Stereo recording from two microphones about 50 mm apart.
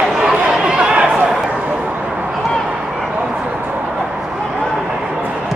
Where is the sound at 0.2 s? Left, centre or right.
Centre.